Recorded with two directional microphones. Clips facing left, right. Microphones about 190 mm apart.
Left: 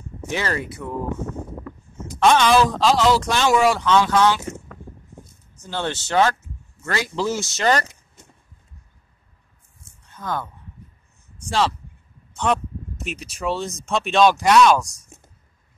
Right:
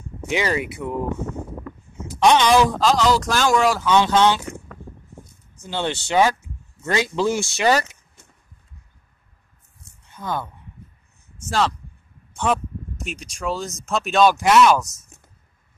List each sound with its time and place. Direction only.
0.3 s speech: 15° right (ahead or behind)
2.0 s speech: 15° right (ahead or behind)
2.8 s speech: centre (ahead or behind)
3.9 s speech: 25° right (ahead or behind)
5.6 s speech: 15° right (ahead or behind)
10.1 s speech: 10° right (ahead or behind)